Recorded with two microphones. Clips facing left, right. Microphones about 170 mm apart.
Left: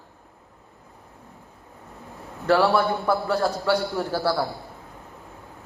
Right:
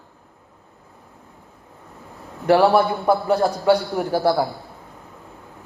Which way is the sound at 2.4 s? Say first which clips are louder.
Right 4 dB; 20° right (ahead or behind).